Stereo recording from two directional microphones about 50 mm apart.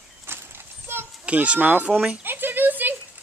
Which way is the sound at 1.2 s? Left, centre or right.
Right.